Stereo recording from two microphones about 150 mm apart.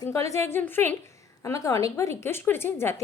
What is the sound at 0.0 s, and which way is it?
A woman's voice, 20° left (ahead or behind).